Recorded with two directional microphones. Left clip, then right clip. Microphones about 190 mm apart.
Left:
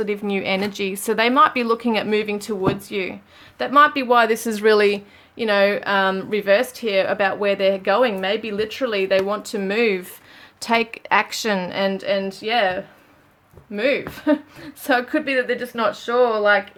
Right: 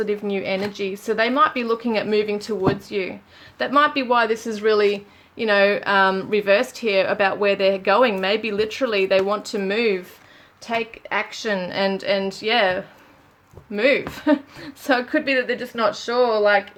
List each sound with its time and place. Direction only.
0.0 s speech: 15° left (ahead or behind)
5.4 s speech: 5° left (ahead or behind)
10.6 s a woman's voice: 30° left (ahead or behind)
11.7 s speech: 5° left (ahead or behind)